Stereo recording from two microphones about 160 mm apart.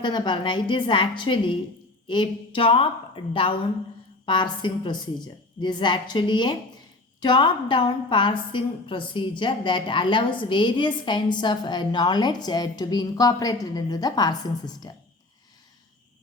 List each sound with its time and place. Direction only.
0.0 s a woman's voice: 30° left (ahead or behind)